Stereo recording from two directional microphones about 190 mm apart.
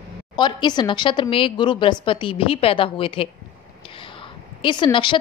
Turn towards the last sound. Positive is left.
turn(degrees=25)  # may be behind; listen again after turning